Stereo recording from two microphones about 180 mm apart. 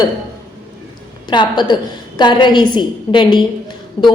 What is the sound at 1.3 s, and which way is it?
A woman's voice, 25° left (ahead or behind).